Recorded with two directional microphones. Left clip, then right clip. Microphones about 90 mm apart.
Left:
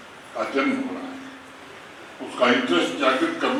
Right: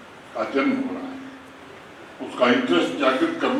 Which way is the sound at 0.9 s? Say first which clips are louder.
Right 1 dB; 25° right (ahead or behind).